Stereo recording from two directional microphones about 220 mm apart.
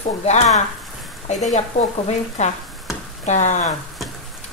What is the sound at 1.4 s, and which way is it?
Speech, 30° left (ahead or behind).